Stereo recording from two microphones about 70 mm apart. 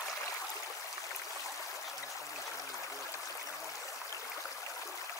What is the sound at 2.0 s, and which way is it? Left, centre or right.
Stream, left.